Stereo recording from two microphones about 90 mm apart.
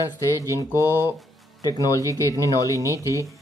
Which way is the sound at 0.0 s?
40° left (ahead or behind).